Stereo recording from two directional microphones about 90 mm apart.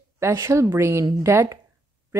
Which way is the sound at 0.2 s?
30° right (ahead or behind).